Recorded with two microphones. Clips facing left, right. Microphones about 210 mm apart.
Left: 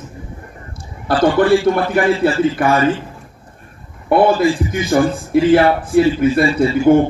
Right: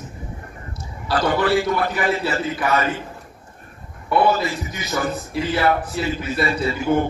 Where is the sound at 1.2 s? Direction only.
50° left (ahead or behind).